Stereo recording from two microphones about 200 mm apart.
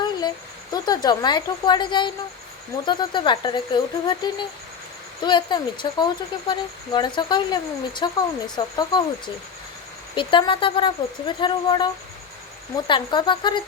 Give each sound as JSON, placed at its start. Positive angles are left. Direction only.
{"t": 0.0, "sound": "speech", "side_deg": 20}